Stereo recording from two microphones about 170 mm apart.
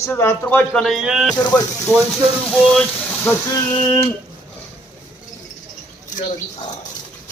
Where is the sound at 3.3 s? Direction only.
20° left (ahead or behind).